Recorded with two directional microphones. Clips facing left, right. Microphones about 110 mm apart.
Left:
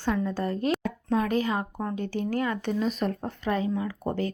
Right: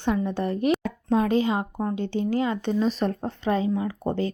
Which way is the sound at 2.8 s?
35° right (ahead or behind).